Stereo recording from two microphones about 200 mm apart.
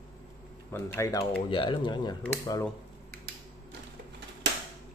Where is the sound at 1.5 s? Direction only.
25° left (ahead or behind).